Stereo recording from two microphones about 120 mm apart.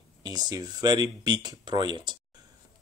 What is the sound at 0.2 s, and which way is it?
Speech, 35° right (ahead or behind).